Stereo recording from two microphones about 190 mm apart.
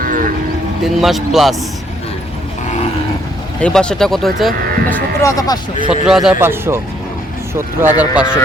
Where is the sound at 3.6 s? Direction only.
5° left (ahead or behind).